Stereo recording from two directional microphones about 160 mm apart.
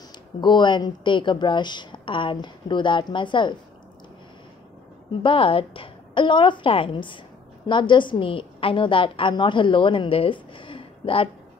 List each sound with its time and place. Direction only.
0.4 s speech: 30° left (ahead or behind)
5.2 s a woman's voice: 35° left (ahead or behind)